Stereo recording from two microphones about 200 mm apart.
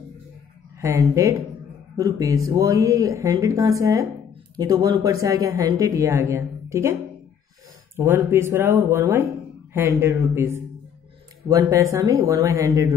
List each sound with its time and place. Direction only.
0.7 s speech: 15° right (ahead or behind)